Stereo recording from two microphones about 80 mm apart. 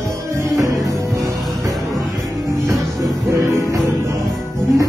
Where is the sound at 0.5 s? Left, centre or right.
Right.